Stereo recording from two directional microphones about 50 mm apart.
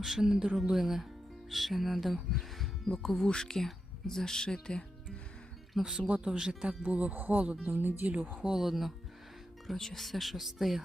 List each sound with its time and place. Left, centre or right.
0.0 s speech: centre
5.7 s speech: centre
6.0 s speech: right
6.8 s speech: right
7.1 s speech: right
8.4 s speech: centre
9.6 s speech: centre